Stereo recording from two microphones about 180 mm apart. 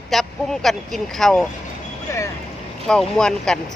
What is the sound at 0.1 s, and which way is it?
Speech, centre (ahead or behind).